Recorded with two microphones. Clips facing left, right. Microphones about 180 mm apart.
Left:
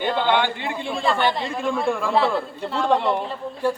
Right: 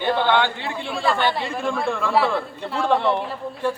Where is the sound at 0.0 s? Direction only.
15° left (ahead or behind).